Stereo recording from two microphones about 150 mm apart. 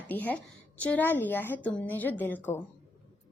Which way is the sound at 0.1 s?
10° left (ahead or behind).